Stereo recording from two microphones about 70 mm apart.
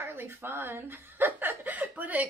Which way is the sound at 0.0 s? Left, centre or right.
Right.